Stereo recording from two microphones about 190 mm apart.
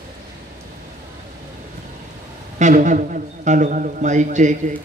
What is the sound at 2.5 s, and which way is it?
A man's voice, 40° right (ahead or behind).